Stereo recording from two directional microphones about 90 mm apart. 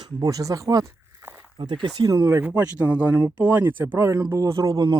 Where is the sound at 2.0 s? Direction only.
35° right (ahead or behind).